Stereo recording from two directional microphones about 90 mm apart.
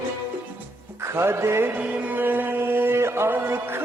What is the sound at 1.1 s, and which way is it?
Music, 30° right (ahead or behind).